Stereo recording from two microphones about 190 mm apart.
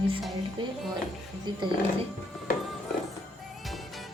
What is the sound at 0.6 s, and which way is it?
Speech, 25° right (ahead or behind).